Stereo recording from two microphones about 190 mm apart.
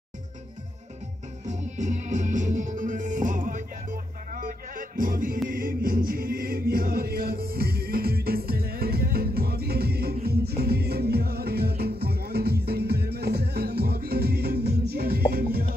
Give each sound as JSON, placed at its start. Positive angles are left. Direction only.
{"t": 1.4, "sound": "music", "side_deg": -40}